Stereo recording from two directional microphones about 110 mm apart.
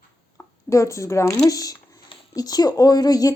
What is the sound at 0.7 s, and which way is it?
Speech, 30° left (ahead or behind).